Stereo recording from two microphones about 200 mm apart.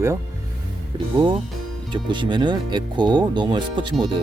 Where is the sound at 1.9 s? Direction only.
20° right (ahead or behind).